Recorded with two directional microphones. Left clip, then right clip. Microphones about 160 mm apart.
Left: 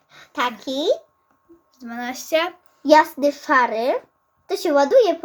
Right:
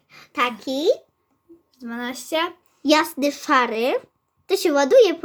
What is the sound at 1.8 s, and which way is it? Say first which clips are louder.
Speech: left 1 dB; 35° right (ahead or behind).